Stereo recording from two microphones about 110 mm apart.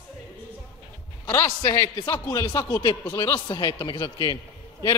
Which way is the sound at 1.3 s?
25° left (ahead or behind).